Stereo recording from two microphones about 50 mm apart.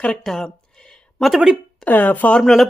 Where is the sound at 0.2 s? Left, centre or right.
Centre.